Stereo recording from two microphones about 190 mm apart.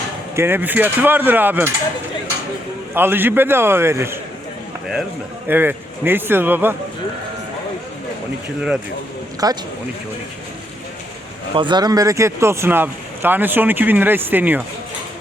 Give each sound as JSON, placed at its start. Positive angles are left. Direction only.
{"t": 0.3, "sound": "speech", "side_deg": -10}
{"t": 2.9, "sound": "speech", "side_deg": -10}
{"t": 5.5, "sound": "speech", "side_deg": -10}
{"t": 9.4, "sound": "a man's voice", "side_deg": -20}
{"t": 11.5, "sound": "speech", "side_deg": -25}